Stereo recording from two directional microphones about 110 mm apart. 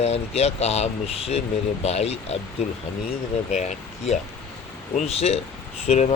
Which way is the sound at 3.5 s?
90° left.